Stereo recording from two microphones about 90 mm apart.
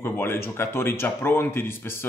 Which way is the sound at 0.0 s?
25° left (ahead or behind).